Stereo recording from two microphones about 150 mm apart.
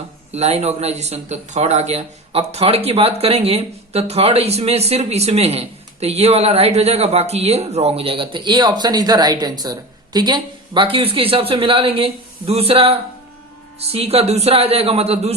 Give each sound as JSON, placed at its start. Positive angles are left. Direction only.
{"t": 0.3, "sound": "speech", "side_deg": -45}